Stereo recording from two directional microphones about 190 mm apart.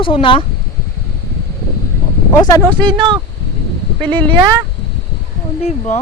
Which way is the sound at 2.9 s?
25° right (ahead or behind).